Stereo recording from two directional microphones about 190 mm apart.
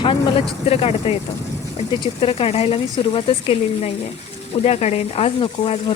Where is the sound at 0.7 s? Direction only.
30° left (ahead or behind).